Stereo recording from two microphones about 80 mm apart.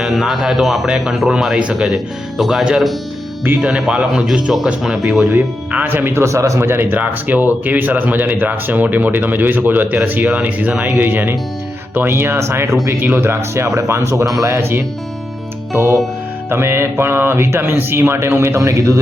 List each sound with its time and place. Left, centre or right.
0.0 s speech: centre
3.4 s speech: right
3.7 s speech: centre
5.2 s speech: right
6.2 s speech: right